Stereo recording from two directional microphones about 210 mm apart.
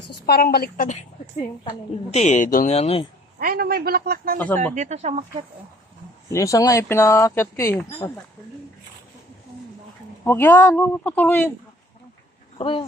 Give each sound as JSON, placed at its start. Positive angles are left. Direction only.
{"t": 0.3, "sound": "a woman's voice", "side_deg": 45}
{"t": 2.0, "sound": "speech", "side_deg": 35}
{"t": 3.3, "sound": "a man's voice", "side_deg": -45}
{"t": 4.4, "sound": "speech", "side_deg": 10}
{"t": 4.7, "sound": "speech", "side_deg": -35}
{"t": 6.3, "sound": "speech", "side_deg": 15}
{"t": 10.2, "sound": "speech", "side_deg": 10}
{"t": 12.5, "sound": "speech", "side_deg": 25}